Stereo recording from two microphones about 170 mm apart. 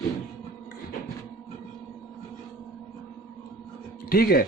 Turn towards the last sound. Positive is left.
turn(degrees=60)  # may be behind; listen again after turning